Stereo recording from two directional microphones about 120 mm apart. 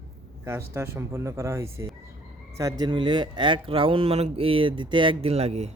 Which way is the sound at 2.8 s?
40° right (ahead or behind).